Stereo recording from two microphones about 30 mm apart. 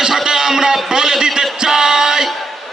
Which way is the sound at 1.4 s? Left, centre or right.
Right.